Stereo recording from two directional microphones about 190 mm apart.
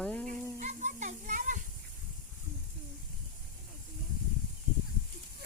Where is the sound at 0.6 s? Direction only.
40° right (ahead or behind).